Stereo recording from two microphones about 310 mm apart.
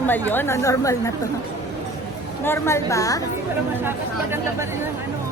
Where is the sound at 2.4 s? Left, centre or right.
Centre.